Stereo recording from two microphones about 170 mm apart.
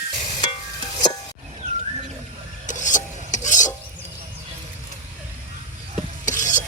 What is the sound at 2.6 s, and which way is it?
Stir, 50° left (ahead or behind).